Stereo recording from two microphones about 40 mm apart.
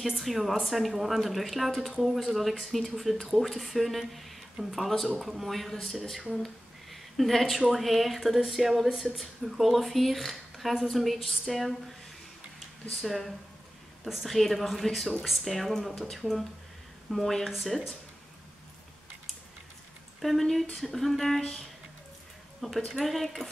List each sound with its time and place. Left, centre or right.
0.0 s speech: centre
6.4 s a sound: centre
7.7 s speech: centre
12.9 s a woman's voice: centre
20.2 s speech: centre
21.4 s a woman's voice: centre